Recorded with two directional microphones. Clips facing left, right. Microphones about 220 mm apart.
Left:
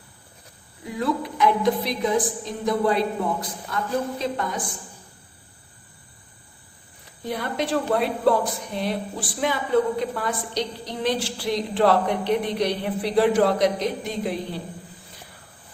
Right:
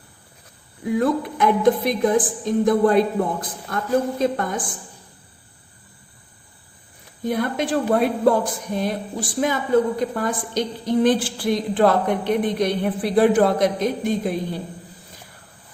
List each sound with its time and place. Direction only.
0.9 s a woman's voice: 50° right (ahead or behind)
7.3 s a woman's voice: 50° right (ahead or behind)